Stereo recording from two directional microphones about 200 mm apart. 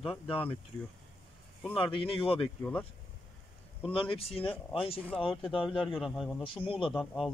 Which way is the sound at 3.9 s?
25° left (ahead or behind).